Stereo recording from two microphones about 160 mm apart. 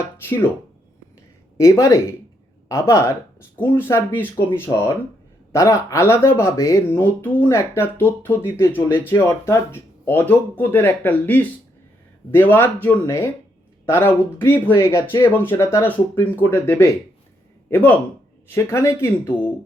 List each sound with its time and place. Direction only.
0.2 s speech: 15° left (ahead or behind)
1.5 s speech: 20° left (ahead or behind)
5.5 s speech: 20° left (ahead or behind)